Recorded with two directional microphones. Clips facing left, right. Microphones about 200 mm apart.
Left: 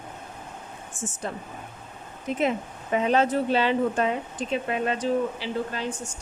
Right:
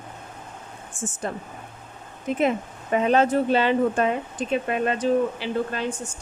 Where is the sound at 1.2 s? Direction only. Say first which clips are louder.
Right 3 dB; 50° right (ahead or behind).